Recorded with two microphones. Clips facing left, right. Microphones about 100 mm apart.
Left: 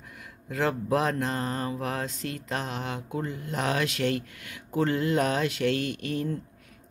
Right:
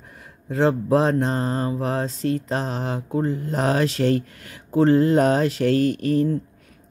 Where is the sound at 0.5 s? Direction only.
30° right (ahead or behind).